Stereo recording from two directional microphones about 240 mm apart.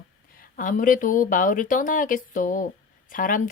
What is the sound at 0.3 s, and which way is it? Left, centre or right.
Speech, left.